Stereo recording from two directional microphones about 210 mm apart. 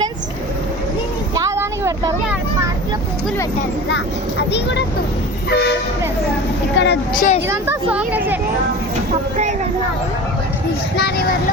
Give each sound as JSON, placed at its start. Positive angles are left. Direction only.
{"t": 1.4, "sound": "vehicle", "side_deg": -15}
{"t": 4.5, "sound": "speech", "side_deg": 55}
{"t": 6.7, "sound": "a woman's voice", "side_deg": 55}
{"t": 7.2, "sound": "speech", "side_deg": 35}
{"t": 7.4, "sound": "speech", "side_deg": -10}
{"t": 10.9, "sound": "speech", "side_deg": 45}